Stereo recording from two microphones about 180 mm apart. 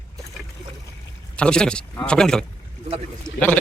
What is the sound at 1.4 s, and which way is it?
Speech, 5° left (ahead or behind).